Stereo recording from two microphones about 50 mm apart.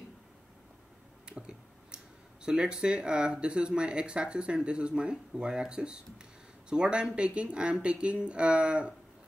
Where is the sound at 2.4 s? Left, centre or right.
Centre.